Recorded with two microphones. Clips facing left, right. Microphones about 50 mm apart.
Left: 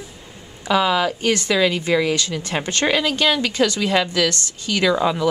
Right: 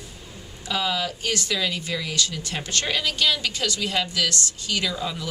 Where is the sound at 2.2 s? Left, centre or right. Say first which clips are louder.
Left 4 dB; left.